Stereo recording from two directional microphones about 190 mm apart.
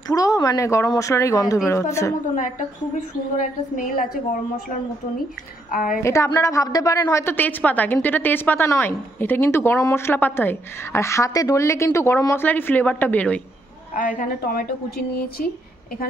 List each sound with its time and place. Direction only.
0.1 s a woman's voice: 20° left (ahead or behind)
3.3 s a woman's voice: 45° left (ahead or behind)
5.7 s a woman's voice: 45° left (ahead or behind)
6.0 s a woman's voice: 15° left (ahead or behind)
13.9 s a woman's voice: 45° left (ahead or behind)